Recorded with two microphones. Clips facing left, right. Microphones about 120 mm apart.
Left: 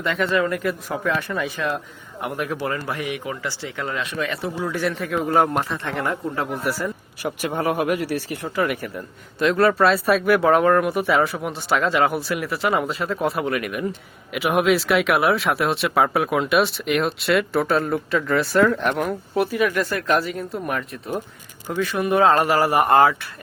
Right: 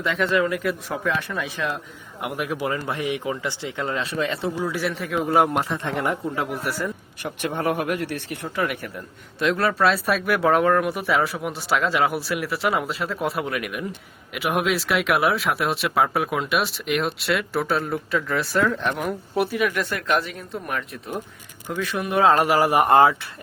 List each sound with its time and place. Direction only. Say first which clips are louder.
0.0 s speech: even; centre (ahead or behind); by 4.5 s 25° right (ahead or behind)
4.5 s speech: left 1 dB; 10° right (ahead or behind)
5.6 s speech: right 1 dB; 20° right (ahead or behind)
6.6 s speech: left 2 dB; centre (ahead or behind)
22.4 s speech: even; 10° right (ahead or behind)